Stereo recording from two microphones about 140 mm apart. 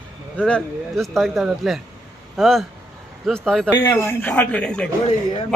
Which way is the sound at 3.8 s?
15° left (ahead or behind).